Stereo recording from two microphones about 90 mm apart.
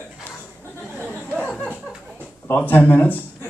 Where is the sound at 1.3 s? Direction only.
10° left (ahead or behind).